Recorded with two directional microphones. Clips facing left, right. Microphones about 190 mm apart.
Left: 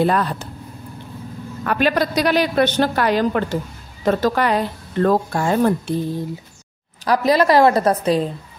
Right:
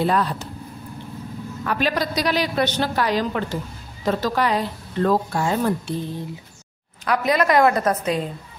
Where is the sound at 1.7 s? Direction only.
55° left (ahead or behind).